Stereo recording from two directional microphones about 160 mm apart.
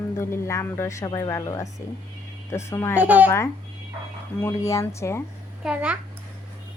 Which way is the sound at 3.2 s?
15° left (ahead or behind).